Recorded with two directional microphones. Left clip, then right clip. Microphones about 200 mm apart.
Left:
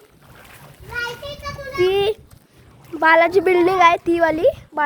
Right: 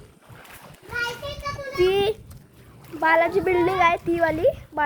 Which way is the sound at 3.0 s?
50° left (ahead or behind).